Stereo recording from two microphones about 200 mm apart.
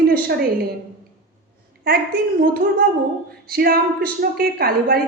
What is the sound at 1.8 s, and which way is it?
A woman's voice, 50° right (ahead or behind).